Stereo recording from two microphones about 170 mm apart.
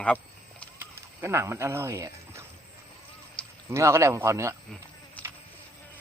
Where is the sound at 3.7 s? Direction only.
15° right (ahead or behind).